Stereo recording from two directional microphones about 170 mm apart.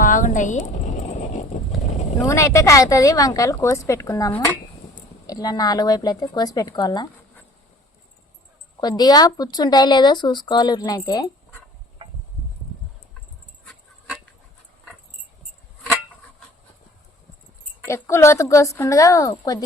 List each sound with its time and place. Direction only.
0.0 s a sound: 50° left (ahead or behind)
2.1 s speech: 20° left (ahead or behind)
8.8 s speech: 25° left (ahead or behind)
17.8 s a woman's voice: 15° left (ahead or behind)